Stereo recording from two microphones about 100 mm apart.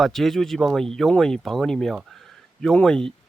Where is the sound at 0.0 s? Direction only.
Centre (ahead or behind).